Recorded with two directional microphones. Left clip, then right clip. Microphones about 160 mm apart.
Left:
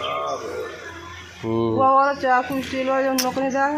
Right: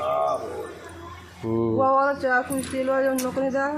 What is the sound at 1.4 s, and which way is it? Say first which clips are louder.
Speech: left 2 dB; 5° right (ahead or behind).